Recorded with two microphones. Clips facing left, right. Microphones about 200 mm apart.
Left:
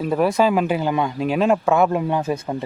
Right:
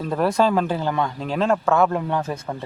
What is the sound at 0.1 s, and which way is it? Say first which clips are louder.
Speech: left 1 dB; 5° left (ahead or behind).